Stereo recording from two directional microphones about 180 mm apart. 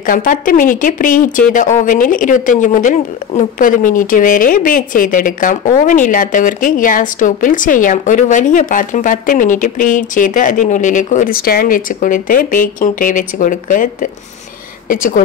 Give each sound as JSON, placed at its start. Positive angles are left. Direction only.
{"t": 0.0, "sound": "speech", "side_deg": 50}
{"t": 14.9, "sound": "speech", "side_deg": 50}